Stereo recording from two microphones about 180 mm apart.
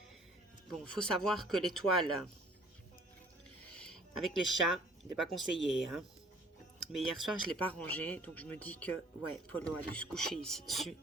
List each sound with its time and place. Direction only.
0.7 s speech: 5° left (ahead or behind)
3.8 s a sound: centre (ahead or behind)
5.1 s speech: centre (ahead or behind)